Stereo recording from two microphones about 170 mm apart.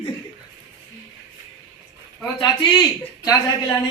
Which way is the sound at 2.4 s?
25° left (ahead or behind).